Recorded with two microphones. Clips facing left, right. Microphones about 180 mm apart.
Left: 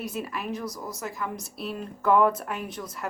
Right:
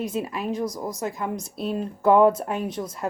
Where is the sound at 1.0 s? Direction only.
30° right (ahead or behind).